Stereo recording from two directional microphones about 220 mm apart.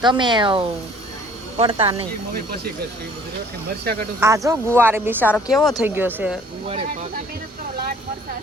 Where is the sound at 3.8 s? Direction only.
45° right (ahead or behind).